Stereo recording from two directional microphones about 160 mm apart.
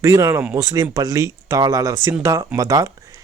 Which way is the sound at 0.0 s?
20° right (ahead or behind).